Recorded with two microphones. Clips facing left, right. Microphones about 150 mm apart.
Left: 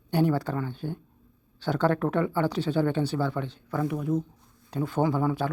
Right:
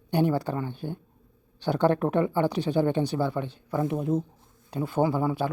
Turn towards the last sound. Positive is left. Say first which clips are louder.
# even
turn(degrees=-10)  # may be behind; listen again after turning